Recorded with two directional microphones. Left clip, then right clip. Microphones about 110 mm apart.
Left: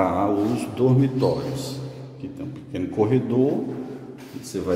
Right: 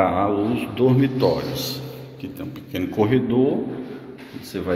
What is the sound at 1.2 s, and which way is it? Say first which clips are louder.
A man's voice: right 3 dB; 10° left (ahead or behind).